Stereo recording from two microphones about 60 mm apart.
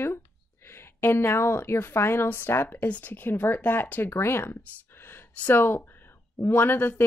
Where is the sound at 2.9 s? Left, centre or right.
Left.